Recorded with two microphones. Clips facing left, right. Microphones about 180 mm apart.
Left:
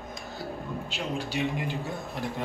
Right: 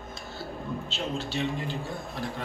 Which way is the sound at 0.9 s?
10° left (ahead or behind).